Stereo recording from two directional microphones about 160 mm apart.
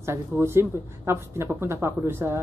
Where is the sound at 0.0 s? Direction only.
15° right (ahead or behind).